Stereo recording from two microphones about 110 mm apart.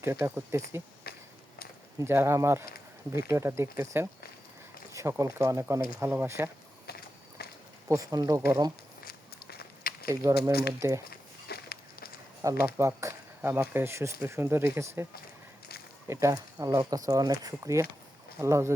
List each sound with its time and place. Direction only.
0.0 s speech: 20° right (ahead or behind)
2.0 s speech: 20° right (ahead or behind)
4.9 s speech: 25° right (ahead or behind)
7.9 s speech: 30° right (ahead or behind)
10.1 s speech: 30° right (ahead or behind)
12.7 s speech: 25° right (ahead or behind)
16.0 s speech: 30° right (ahead or behind)